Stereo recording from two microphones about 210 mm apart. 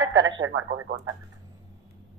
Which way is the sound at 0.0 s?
65° right (ahead or behind).